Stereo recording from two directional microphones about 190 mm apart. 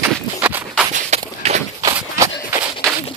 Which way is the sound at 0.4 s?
10° right (ahead or behind).